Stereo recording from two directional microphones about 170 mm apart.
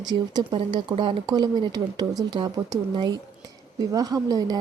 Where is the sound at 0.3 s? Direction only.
25° right (ahead or behind).